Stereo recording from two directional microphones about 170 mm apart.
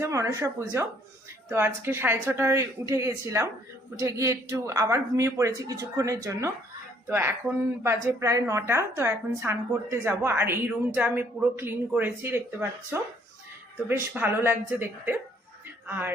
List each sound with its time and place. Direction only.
0.0 s a woman's voice: 20° right (ahead or behind)